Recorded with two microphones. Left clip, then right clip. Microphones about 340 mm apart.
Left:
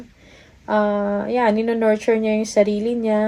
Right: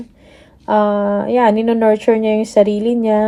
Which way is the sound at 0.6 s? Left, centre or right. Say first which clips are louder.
Right 5 dB; right.